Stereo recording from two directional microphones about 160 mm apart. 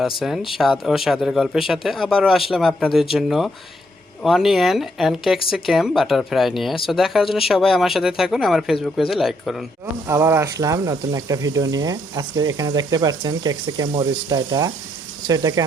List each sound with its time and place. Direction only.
0.0 s speech: centre (ahead or behind)
9.8 s speech: 15° right (ahead or behind)